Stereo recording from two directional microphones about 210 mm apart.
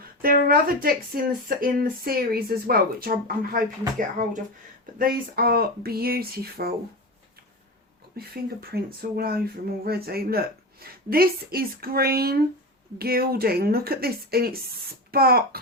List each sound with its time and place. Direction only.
0.2 s speech: 45° right (ahead or behind)
8.1 s speech: 45° right (ahead or behind)